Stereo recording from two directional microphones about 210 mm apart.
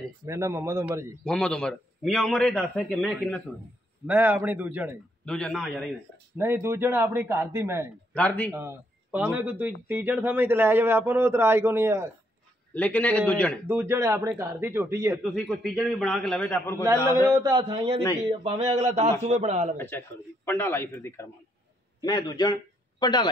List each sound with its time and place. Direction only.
0.3 s a man's voice: 15° right (ahead or behind)
1.2 s a man's voice: 5° left (ahead or behind)
4.1 s a man's voice: 10° right (ahead or behind)
5.2 s a man's voice: 5° left (ahead or behind)
6.3 s a man's voice: 10° right (ahead or behind)
8.1 s a man's voice: 5° left (ahead or behind)
8.5 s a man's voice: 10° right (ahead or behind)
12.7 s a man's voice: 5° left (ahead or behind)
13.7 s a man's voice: 10° right (ahead or behind)
15.2 s a man's voice: 5° left (ahead or behind)
16.8 s a man's voice: 15° right (ahead or behind)
18.4 s a sound: 30° right (ahead or behind)
20.4 s a man's voice: 10° left (ahead or behind)